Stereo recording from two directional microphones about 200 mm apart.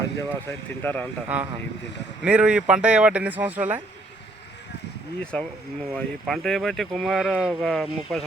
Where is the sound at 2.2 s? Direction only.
5° right (ahead or behind).